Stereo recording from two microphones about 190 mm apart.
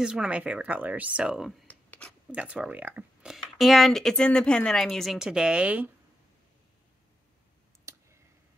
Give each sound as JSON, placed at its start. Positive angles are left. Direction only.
{"t": 0.0, "sound": "speech", "side_deg": -5}
{"t": 1.7, "sound": "a sound", "side_deg": 5}
{"t": 2.3, "sound": "speech", "side_deg": -5}
{"t": 7.9, "sound": "clicking", "side_deg": -15}